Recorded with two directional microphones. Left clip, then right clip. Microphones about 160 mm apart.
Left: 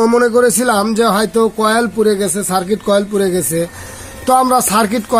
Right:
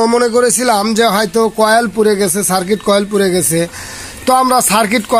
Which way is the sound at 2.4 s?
25° right (ahead or behind).